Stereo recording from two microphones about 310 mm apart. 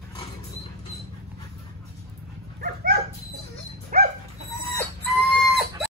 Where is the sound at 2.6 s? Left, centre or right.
Right.